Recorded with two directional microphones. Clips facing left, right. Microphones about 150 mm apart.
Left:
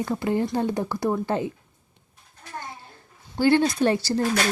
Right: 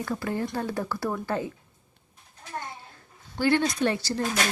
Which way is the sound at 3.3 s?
30° left (ahead or behind).